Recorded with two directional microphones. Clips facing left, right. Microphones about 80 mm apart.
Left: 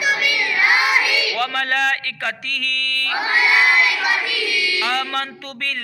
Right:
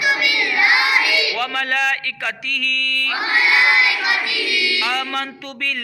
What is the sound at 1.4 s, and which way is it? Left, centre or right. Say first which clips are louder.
A man's voice: left 1 dB; left.